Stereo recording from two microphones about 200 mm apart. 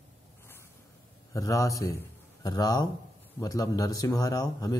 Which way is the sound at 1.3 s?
15° left (ahead or behind).